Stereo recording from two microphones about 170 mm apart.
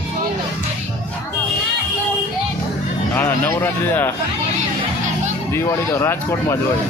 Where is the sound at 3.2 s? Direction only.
10° left (ahead or behind).